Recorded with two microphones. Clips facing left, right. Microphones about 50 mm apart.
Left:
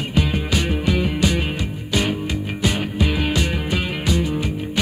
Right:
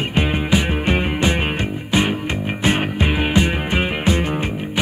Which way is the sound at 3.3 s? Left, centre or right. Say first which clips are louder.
Right 3 dB; right.